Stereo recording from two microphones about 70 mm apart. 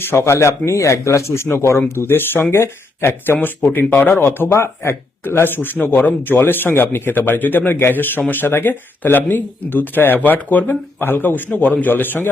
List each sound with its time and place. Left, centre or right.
0.0 s speech: left
4.1 s speech: left